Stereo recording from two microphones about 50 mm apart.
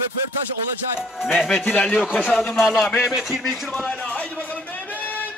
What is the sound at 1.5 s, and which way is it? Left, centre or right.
Speech, left.